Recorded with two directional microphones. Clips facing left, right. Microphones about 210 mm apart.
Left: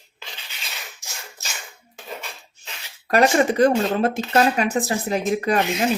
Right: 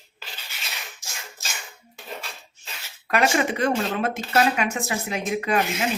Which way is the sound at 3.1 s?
35° left (ahead or behind).